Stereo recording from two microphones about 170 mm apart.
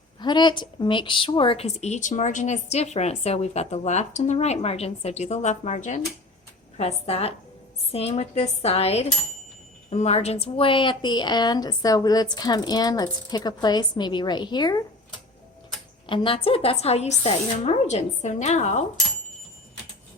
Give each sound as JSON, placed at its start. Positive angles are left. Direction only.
{"t": 0.2, "sound": "a woman's voice", "side_deg": 25}
{"t": 16.0, "sound": "a woman's voice", "side_deg": 30}